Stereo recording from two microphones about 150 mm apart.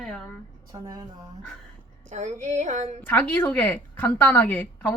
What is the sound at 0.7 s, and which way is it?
Speech, 25° right (ahead or behind).